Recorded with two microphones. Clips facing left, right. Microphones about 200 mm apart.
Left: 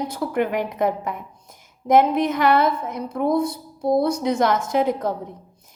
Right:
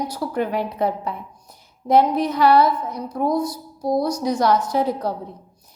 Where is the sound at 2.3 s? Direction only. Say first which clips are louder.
Right 6 dB; 50° left (ahead or behind).